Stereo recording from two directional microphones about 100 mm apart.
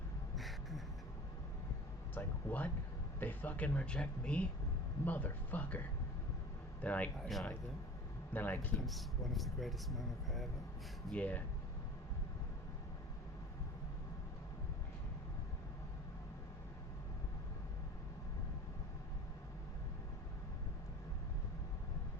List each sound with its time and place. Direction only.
0.3 s a sound: centre (ahead or behind)
2.1 s speech: 15° left (ahead or behind)
6.8 s speech: 15° left (ahead or behind)
7.2 s speech: centre (ahead or behind)
8.3 s speech: 20° left (ahead or behind)
8.8 s speech: centre (ahead or behind)
11.1 s speech: 15° left (ahead or behind)